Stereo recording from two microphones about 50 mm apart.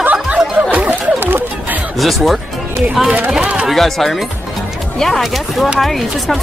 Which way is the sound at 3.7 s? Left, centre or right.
Centre.